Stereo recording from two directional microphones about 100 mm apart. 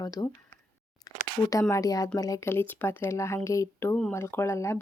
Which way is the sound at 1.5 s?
30° left (ahead or behind).